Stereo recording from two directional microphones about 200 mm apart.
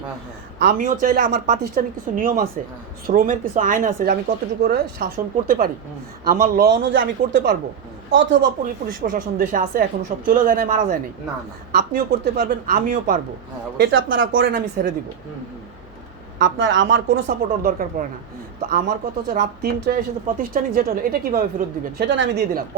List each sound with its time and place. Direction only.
0.6 s a man's voice: 45° right (ahead or behind); by 8.4 s 65° right (ahead or behind)
8.6 s speech: 45° right (ahead or behind)
13.7 s speech: 70° right (ahead or behind)
16.4 s speech: 70° right (ahead or behind)
17.2 s speech: 45° right (ahead or behind)
21.9 s a man's voice: 60° right (ahead or behind)